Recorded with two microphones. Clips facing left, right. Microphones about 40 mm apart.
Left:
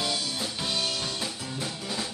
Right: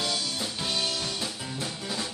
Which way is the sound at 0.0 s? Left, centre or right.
Centre.